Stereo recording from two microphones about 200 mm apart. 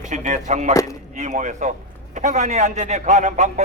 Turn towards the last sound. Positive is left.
turn(degrees=-35)  # may be behind; listen again after turning